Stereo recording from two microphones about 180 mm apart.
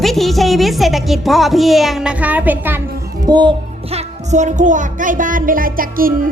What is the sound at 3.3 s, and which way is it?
A child's voice, 25° right (ahead or behind).